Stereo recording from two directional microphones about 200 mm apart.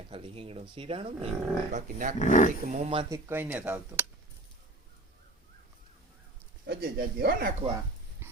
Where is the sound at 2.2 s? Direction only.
40° left (ahead or behind).